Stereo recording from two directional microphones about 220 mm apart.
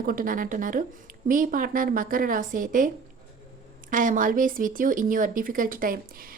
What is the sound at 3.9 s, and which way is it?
A woman's voice, 35° right (ahead or behind).